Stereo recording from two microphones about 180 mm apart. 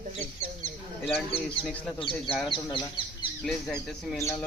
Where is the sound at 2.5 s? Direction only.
25° left (ahead or behind).